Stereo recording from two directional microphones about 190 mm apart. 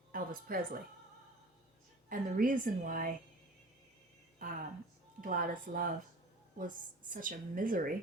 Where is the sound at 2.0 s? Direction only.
45° right (ahead or behind).